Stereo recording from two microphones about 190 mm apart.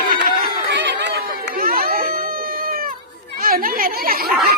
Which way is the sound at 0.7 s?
65° right (ahead or behind).